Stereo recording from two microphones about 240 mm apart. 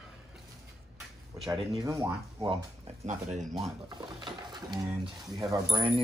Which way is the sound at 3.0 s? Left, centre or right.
Right.